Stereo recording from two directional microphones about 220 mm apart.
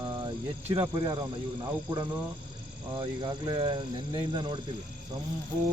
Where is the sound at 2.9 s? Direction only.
20° right (ahead or behind).